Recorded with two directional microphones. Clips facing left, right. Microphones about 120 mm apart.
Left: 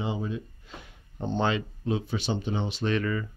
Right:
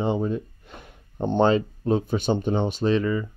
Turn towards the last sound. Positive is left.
turn(degrees=-20)  # may be behind; listen again after turning